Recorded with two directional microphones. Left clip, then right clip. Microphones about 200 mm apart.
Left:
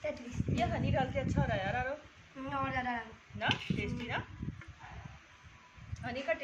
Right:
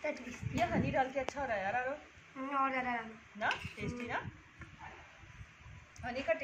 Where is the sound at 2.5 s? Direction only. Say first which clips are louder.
Right 1 dB; 15° left (ahead or behind).